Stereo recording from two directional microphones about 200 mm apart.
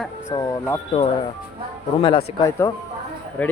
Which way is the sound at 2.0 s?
25° left (ahead or behind).